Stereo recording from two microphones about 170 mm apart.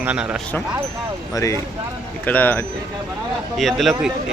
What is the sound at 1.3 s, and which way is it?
Speech, 20° left (ahead or behind).